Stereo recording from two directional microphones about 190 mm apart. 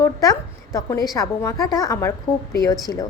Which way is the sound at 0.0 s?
20° left (ahead or behind).